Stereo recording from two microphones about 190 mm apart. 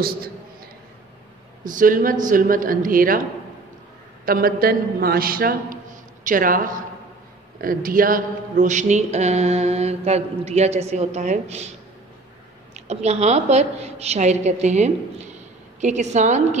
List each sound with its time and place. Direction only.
1.6 s a man's voice: 45° right (ahead or behind)
4.3 s a man's voice: 50° right (ahead or behind)
12.7 s speech: 35° right (ahead or behind)